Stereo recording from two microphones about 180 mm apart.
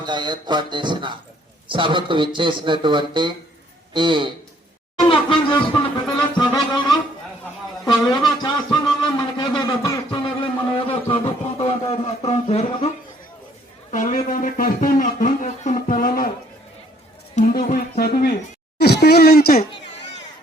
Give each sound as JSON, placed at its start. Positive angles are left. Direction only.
{"t": 0.0, "sound": "a man's voice", "side_deg": -25}
{"t": 5.0, "sound": "speech", "side_deg": 30}
{"t": 6.1, "sound": "music", "side_deg": 25}
{"t": 7.9, "sound": "speech", "side_deg": 20}
{"t": 8.4, "sound": "a sound", "side_deg": 25}
{"t": 11.9, "sound": "music", "side_deg": 35}
{"t": 13.9, "sound": "a sound", "side_deg": 45}
{"t": 17.3, "sound": "speech", "side_deg": 45}